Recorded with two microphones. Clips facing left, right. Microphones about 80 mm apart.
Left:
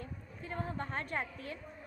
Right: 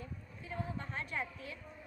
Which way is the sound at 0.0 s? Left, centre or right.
Left.